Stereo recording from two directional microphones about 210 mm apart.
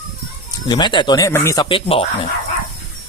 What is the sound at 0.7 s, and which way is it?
Speech, 20° left (ahead or behind).